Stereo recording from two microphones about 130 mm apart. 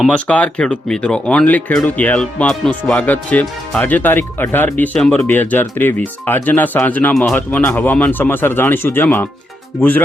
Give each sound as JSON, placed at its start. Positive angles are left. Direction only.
{"t": 0.0, "sound": "speech", "side_deg": 10}